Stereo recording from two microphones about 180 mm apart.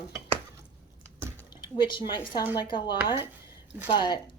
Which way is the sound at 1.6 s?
25° left (ahead or behind).